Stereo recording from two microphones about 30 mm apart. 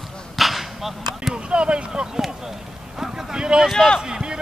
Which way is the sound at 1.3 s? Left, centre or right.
Right.